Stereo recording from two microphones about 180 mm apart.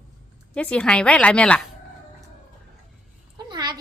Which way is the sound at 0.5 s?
5° left (ahead or behind).